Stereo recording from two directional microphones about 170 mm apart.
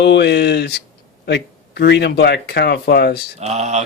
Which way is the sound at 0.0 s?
85° left.